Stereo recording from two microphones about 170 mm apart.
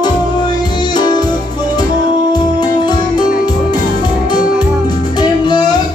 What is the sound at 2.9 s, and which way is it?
Music, 25° left (ahead or behind).